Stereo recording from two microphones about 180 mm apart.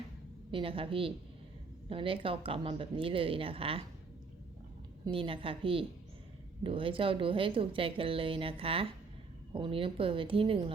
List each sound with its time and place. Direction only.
0.5 s a woman's voice: 30° right (ahead or behind)
5.0 s a woman's voice: 30° right (ahead or behind)